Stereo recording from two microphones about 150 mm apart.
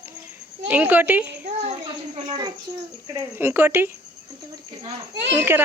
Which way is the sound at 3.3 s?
15° right (ahead or behind).